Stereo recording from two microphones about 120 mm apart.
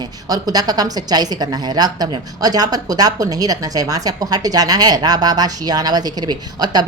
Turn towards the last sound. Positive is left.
turn(degrees=-35)  # may be behind; listen again after turning